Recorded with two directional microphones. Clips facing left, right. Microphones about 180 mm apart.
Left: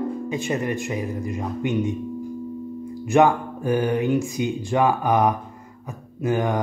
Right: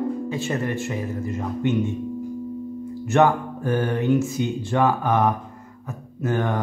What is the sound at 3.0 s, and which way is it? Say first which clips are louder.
Speech: left 1 dB; 10° left (ahead or behind).